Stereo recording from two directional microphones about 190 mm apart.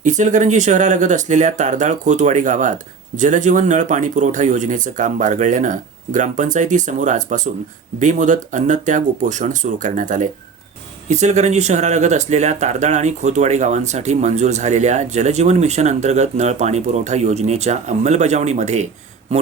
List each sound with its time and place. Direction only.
0.0 s speech: 40° right (ahead or behind)